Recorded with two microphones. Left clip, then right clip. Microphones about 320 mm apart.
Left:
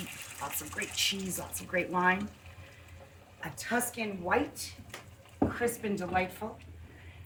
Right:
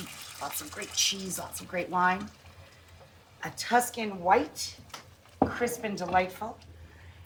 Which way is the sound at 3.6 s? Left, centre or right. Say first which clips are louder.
Right 7 dB; centre.